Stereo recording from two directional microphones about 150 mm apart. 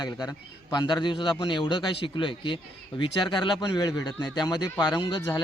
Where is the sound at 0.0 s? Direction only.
25° left (ahead or behind).